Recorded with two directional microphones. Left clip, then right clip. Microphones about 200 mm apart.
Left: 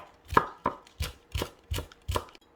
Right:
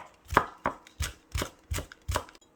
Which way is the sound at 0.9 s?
10° right (ahead or behind).